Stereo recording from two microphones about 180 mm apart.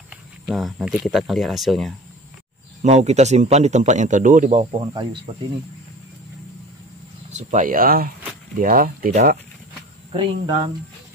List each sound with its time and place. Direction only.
0.1 s speech: centre (ahead or behind)
2.8 s speech: 40° right (ahead or behind)
7.2 s speech: 45° right (ahead or behind)
10.1 s speech: 25° right (ahead or behind)